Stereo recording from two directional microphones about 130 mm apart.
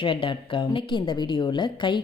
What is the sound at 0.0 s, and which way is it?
A woman's voice, 40° left (ahead or behind).